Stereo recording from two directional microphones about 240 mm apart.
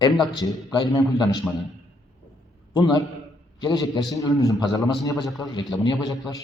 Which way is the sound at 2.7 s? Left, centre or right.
Centre.